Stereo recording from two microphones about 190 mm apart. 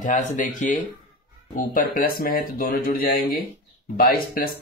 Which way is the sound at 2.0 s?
50° left (ahead or behind).